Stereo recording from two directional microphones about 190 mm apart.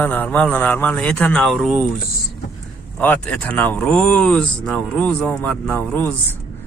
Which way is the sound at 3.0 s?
10° left (ahead or behind).